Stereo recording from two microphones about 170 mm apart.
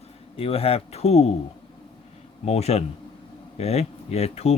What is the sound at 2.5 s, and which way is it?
Speech, 40° left (ahead or behind).